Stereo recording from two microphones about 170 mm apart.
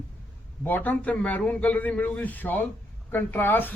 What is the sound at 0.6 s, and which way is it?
A man's voice, 10° left (ahead or behind).